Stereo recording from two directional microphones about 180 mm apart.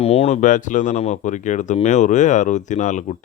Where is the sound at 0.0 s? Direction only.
35° left (ahead or behind).